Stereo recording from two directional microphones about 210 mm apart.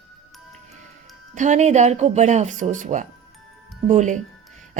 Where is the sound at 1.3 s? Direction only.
35° right (ahead or behind).